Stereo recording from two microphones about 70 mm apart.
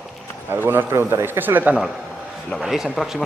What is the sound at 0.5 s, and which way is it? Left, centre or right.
Speech, right.